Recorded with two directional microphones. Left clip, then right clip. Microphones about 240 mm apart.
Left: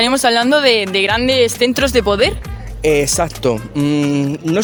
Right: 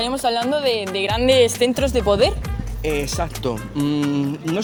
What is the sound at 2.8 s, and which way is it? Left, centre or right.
Speech, left.